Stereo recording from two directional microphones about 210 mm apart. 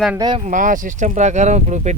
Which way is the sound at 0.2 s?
20° right (ahead or behind).